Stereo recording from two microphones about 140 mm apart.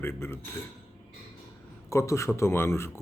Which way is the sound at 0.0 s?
15° left (ahead or behind).